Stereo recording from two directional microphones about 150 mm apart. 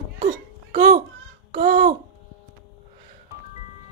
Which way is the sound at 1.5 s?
45° right (ahead or behind).